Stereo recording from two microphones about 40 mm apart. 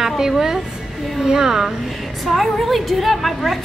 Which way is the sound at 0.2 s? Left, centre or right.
Centre.